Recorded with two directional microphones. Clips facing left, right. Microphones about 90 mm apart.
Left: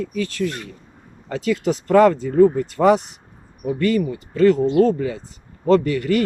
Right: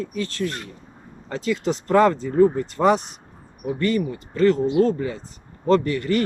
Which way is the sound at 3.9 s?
35° right (ahead or behind).